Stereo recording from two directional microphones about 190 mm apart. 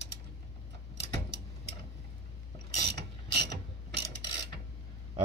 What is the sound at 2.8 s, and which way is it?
Mechanisms, 60° right (ahead or behind).